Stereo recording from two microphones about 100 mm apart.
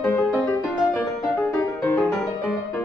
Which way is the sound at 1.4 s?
25° left (ahead or behind).